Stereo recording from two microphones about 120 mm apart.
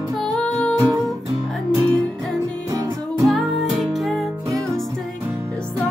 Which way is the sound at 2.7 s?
30° right (ahead or behind).